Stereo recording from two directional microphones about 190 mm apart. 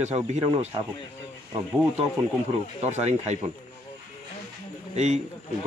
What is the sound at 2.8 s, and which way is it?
Speech, 35° right (ahead or behind).